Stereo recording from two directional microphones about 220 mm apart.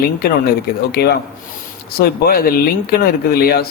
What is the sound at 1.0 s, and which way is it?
A man's voice, 45° left (ahead or behind).